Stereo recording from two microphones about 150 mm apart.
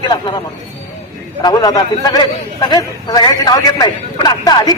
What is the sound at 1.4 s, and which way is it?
A man's voice, 25° left (ahead or behind).